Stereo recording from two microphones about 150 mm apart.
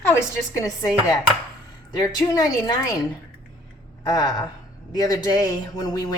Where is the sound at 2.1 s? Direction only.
25° left (ahead or behind).